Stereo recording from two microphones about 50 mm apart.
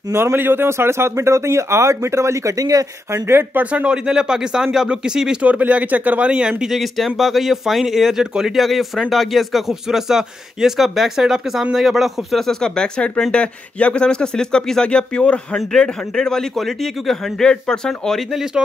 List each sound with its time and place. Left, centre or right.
0.1 s speech: right
3.1 s speech: right
3.5 s speech: right
3.9 s speech: centre
5.4 s speech: right
6.6 s speech: centre
17.4 s speech: centre
18.3 s speech: centre